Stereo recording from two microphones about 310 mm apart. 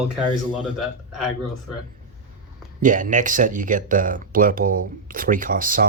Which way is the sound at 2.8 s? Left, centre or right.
Right.